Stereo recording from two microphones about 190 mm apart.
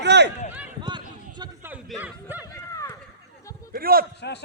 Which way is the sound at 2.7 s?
15° left (ahead or behind).